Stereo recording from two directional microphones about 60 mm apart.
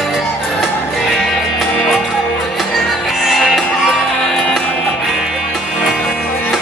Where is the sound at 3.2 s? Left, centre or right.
Centre.